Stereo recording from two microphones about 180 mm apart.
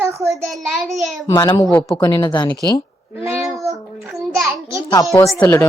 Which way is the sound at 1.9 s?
25° left (ahead or behind).